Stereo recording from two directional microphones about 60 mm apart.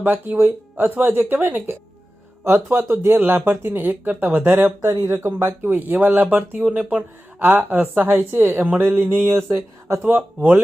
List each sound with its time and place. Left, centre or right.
0.0 s speech: right
3.8 s speech: right
6.7 s speech: centre
7.3 s speech: right
10.0 s speech: right